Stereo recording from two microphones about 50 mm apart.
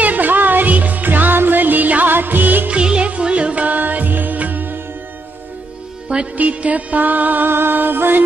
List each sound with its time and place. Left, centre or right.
0.0 s music: right
2.7 s music: right
6.3 s music: right